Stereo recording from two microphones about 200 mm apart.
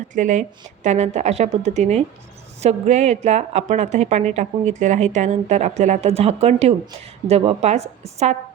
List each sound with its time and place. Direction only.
0.1 s a woman's voice: 40° right (ahead or behind)